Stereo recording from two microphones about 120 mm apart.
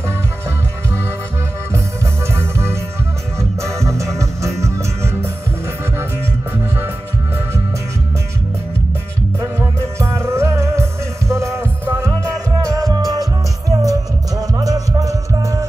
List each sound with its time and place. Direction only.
2.3 s music: 20° right (ahead or behind)
9.6 s music: 20° right (ahead or behind)